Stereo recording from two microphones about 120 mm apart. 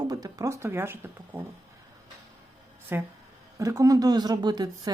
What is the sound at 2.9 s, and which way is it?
Speech, 20° right (ahead or behind).